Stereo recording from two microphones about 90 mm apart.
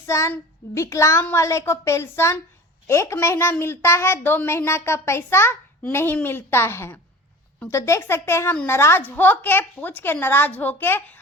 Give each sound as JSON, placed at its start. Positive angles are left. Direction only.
{"t": 0.0, "sound": "child singing", "side_deg": 30}
{"t": 1.3, "sound": "a woman's voice", "side_deg": 35}
{"t": 2.8, "sound": "child singing", "side_deg": 30}
{"t": 3.6, "sound": "a woman's voice", "side_deg": 25}